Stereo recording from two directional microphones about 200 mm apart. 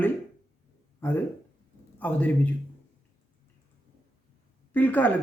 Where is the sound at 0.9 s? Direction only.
10° left (ahead or behind).